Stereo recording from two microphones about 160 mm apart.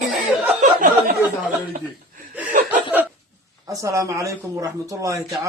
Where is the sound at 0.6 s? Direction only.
55° right (ahead or behind).